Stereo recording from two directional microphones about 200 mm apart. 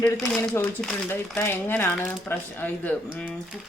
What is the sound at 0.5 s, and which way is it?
A woman's voice, 5° left (ahead or behind).